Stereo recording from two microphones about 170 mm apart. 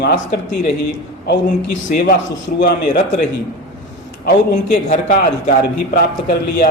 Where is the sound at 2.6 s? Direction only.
60° left (ahead or behind).